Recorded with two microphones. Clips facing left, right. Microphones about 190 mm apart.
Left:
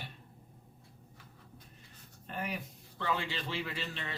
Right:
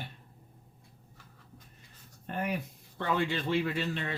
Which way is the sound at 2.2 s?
55° right (ahead or behind).